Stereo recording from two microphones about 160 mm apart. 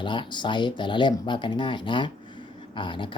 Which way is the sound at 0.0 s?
30° left (ahead or behind).